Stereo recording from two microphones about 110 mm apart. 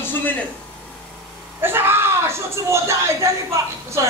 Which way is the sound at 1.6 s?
20° right (ahead or behind).